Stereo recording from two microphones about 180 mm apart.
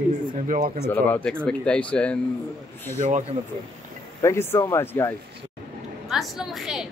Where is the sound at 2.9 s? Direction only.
45° right (ahead or behind).